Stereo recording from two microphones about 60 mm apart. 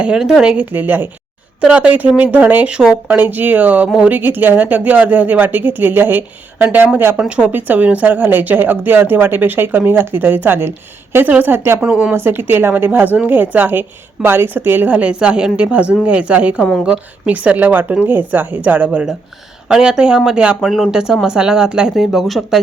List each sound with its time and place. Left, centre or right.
0.2 s speech: centre
0.5 s speech: right
1.6 s speech: right
7.2 s speech: centre
7.5 s speech: right
11.3 s speech: right
11.8 s speech: right
12.1 s speech: right
19.6 s speech: centre